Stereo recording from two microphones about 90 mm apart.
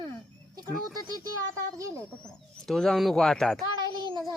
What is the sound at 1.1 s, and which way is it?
Speech, 40° right (ahead or behind).